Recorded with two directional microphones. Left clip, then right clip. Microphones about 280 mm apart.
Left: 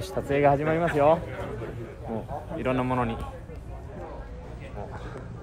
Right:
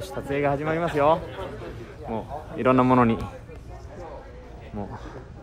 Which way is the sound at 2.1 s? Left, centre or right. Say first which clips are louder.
Right 2 dB; right.